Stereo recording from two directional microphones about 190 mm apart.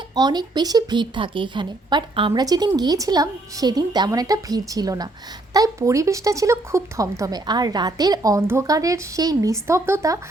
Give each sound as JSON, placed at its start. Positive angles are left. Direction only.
{"t": 0.2, "sound": "a woman's voice", "side_deg": -20}